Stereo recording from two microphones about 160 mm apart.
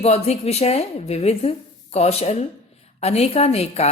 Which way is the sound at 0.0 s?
40° left (ahead or behind).